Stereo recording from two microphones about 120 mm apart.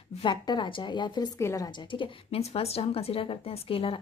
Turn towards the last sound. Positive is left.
turn(degrees=50)  # may be behind; listen again after turning